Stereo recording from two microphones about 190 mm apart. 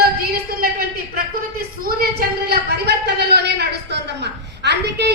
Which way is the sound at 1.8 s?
55° right (ahead or behind).